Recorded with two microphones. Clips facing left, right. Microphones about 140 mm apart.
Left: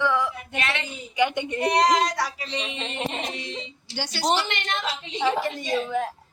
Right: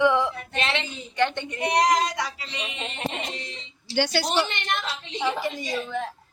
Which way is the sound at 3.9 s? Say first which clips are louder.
Right 9 dB; 70° right (ahead or behind).